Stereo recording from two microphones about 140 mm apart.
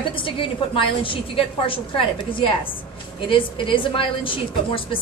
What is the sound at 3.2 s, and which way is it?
A woman's voice, 40° left (ahead or behind).